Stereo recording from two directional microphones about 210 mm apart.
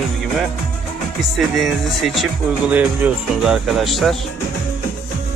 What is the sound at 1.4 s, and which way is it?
Speech, centre (ahead or behind).